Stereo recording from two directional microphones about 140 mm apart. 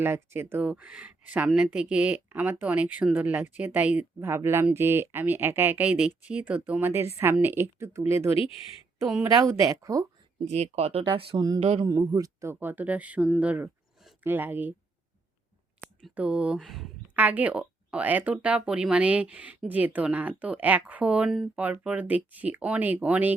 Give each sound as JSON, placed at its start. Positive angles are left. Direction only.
{"t": 0.0, "sound": "speech", "side_deg": -15}
{"t": 10.5, "sound": "speech", "side_deg": -50}
{"t": 11.9, "sound": "speech", "side_deg": -25}
{"t": 16.0, "sound": "speech", "side_deg": -5}
{"t": 17.2, "sound": "speech", "side_deg": -10}